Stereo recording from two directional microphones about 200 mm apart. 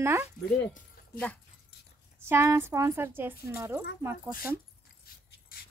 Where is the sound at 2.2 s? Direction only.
10° right (ahead or behind).